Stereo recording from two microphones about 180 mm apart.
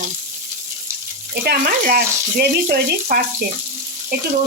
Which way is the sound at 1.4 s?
60° right (ahead or behind).